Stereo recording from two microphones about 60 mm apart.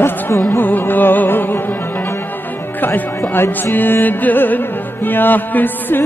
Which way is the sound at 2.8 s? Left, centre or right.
Left.